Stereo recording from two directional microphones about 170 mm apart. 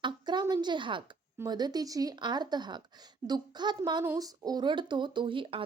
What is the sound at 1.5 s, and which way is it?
Speech, 25° right (ahead or behind).